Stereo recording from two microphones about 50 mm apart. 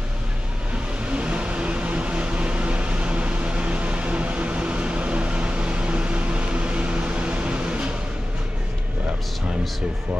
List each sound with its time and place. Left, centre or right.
1.0 s vehicle: right